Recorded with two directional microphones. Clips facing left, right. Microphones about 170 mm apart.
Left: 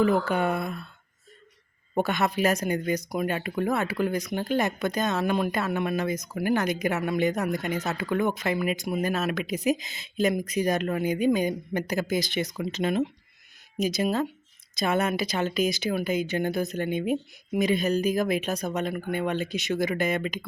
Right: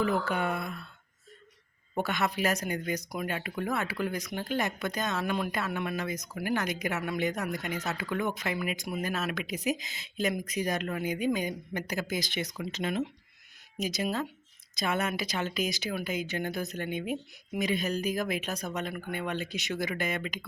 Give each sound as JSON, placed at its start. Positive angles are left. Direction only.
{"t": 0.0, "sound": "speech", "side_deg": 30}
{"t": 2.0, "sound": "speech", "side_deg": 25}